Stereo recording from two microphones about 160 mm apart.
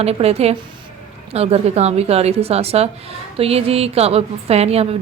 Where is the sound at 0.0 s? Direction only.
40° right (ahead or behind).